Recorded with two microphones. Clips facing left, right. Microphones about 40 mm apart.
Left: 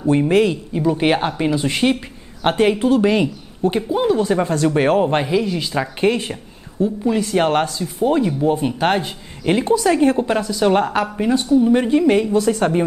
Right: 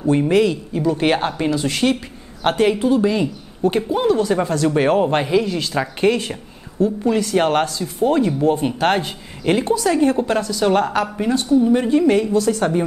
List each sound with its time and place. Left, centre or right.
0.3 s a woman's voice: centre
0.7 s a woman's voice: centre
3.0 s speech: left
3.6 s a woman's voice: centre
4.9 s speech: centre
6.8 s a woman's voice: centre
7.2 s speech: centre
9.7 s a woman's voice: centre